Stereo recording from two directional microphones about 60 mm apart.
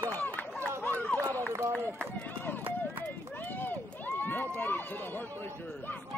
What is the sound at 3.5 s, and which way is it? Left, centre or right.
Run, left.